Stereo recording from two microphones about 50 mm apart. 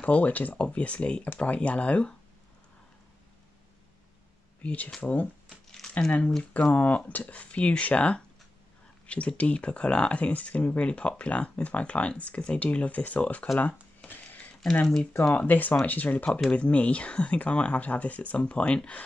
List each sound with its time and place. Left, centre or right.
0.0 s speech: left
4.6 s speech: left
13.6 s a sound: left
15.3 s speech: left